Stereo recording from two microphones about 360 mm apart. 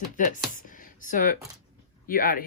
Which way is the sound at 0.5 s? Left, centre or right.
Left.